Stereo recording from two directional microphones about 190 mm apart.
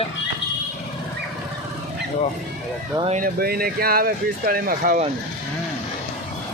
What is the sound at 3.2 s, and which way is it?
Speech, 50° right (ahead or behind).